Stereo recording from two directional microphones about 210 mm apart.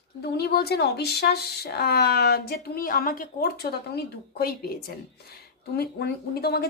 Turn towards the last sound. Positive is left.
turn(degrees=50)  # may be behind; listen again after turning